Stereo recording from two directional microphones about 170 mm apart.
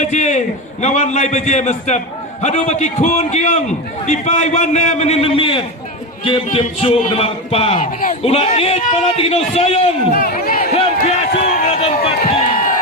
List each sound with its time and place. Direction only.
0.0 s a man's voice: 45° left (ahead or behind)
10.1 s speech: 60° left (ahead or behind)
10.8 s a sound: 40° left (ahead or behind)